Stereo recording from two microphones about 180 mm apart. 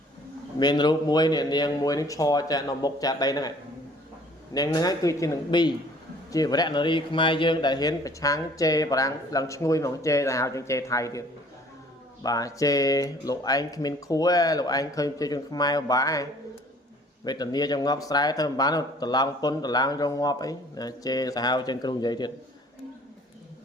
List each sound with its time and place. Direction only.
0.6 s speech: 25° left (ahead or behind)
4.5 s speech: 20° left (ahead or behind)
12.2 s speech: 20° left (ahead or behind)